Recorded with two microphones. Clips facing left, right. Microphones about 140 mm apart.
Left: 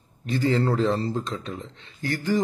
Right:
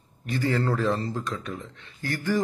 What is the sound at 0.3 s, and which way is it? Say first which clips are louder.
A man's voice: left 3 dB; 20° left (ahead or behind).